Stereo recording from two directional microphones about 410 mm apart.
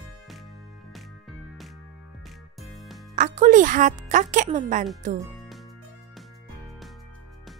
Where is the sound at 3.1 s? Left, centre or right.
Centre.